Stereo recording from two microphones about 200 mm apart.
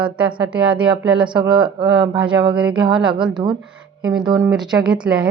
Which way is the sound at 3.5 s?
Centre (ahead or behind).